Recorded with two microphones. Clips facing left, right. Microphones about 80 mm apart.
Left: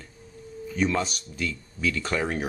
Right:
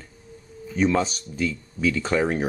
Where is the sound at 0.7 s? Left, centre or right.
Centre.